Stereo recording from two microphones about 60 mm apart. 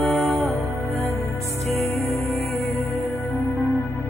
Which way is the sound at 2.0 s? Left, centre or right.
Left.